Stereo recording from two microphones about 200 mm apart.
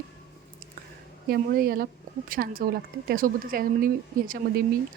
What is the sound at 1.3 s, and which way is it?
Speech, 50° right (ahead or behind).